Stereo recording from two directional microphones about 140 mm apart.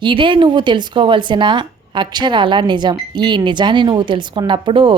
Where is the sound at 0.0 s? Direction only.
35° right (ahead or behind).